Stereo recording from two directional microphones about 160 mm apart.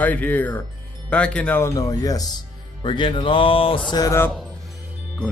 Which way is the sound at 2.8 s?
30° left (ahead or behind).